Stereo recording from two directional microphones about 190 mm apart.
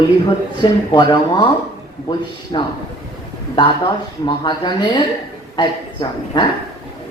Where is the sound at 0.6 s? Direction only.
25° left (ahead or behind).